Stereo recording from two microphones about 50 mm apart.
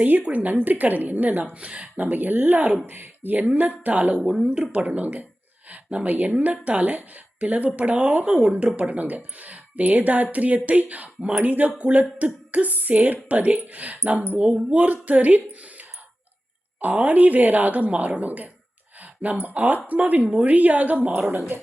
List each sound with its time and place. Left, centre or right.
0.0 s speech: right
1.5 s speech: right
21.3 s speech: right